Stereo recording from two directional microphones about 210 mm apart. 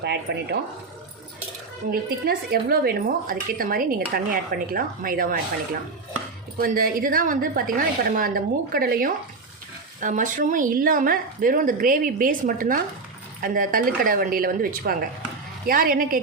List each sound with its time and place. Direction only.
0.0 s a woman's voice: 50° right (ahead or behind)
1.9 s a woman's voice: 45° right (ahead or behind)
6.6 s a woman's voice: 45° right (ahead or behind)